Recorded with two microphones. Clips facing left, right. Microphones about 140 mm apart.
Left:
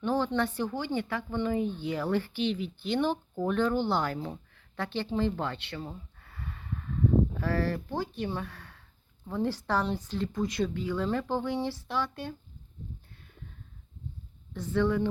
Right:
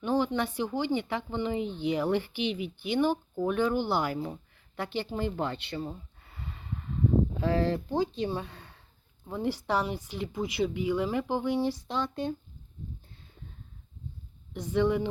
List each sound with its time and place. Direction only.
0.0 s speech: 15° right (ahead or behind)
14.5 s speech: 15° right (ahead or behind)